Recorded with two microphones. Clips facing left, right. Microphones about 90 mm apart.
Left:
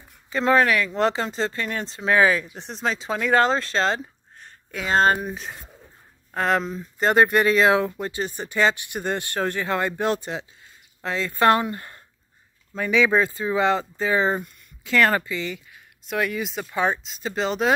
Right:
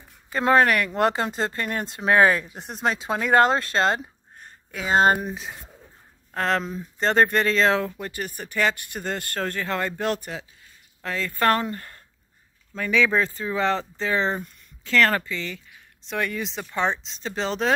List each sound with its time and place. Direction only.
0.3 s speech: 40° right (ahead or behind)
4.6 s speech: 10° right (ahead or behind)
5.2 s speech: centre (ahead or behind)
7.1 s a woman's voice: 10° left (ahead or behind)
16.1 s speech: 5° left (ahead or behind)